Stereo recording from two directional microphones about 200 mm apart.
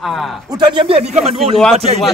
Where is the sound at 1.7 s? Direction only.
30° right (ahead or behind).